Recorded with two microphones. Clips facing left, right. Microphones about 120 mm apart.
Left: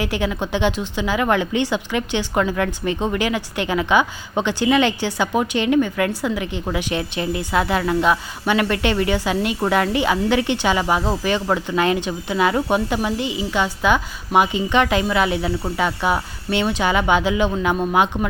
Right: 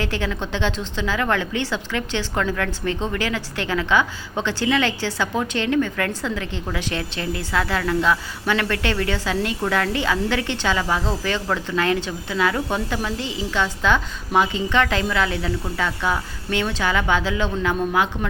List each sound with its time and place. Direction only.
0.0 s a woman's voice: 15° left (ahead or behind)